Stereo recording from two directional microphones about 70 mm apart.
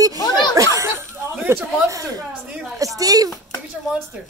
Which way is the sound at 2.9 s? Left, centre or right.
Right.